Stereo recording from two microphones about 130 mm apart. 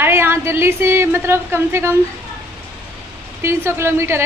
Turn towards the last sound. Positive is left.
turn(degrees=-20)  # may be behind; listen again after turning